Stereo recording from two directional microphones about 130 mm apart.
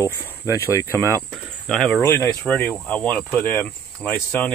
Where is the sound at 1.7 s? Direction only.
10° left (ahead or behind).